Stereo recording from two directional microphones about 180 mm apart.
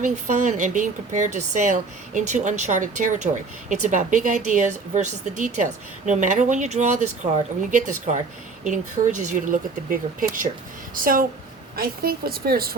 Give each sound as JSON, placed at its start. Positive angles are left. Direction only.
{"t": 0.0, "sound": "speech", "side_deg": -45}